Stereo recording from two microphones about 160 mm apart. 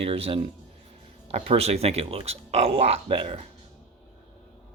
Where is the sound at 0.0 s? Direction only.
35° right (ahead or behind).